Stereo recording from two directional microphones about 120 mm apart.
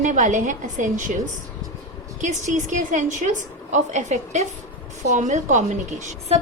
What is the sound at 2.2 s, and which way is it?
A woman's voice, 85° right.